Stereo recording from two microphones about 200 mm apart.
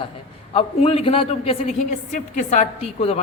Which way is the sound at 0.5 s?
30° left (ahead or behind).